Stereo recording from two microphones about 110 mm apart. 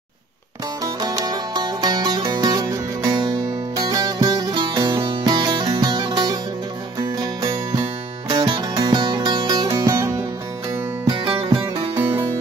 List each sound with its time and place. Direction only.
0.8 s music: 35° right (ahead or behind)
8.3 s music: 40° right (ahead or behind)
12.0 s music: 20° right (ahead or behind)